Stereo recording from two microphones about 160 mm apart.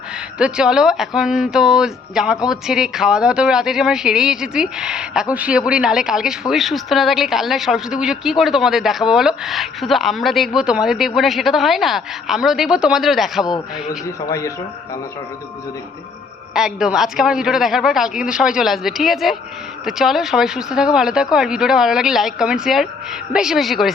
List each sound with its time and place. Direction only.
0.3 s a woman's voice: 5° right (ahead or behind)
14.3 s speech: 20° left (ahead or behind)
16.6 s a woman's voice: 5° right (ahead or behind)